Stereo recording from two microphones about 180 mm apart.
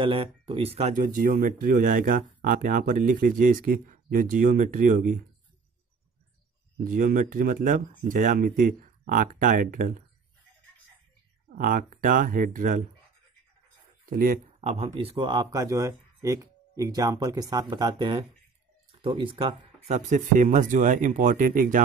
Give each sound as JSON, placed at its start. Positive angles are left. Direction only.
{"t": 0.0, "sound": "speech", "side_deg": -30}
{"t": 6.8, "sound": "speech", "side_deg": -50}
{"t": 11.5, "sound": "speech", "side_deg": -50}
{"t": 14.1, "sound": "speech", "side_deg": -50}
{"t": 14.6, "sound": "speech", "side_deg": -35}